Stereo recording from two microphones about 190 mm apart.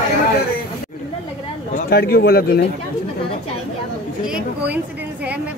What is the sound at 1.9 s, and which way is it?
Speech, 55° left (ahead or behind).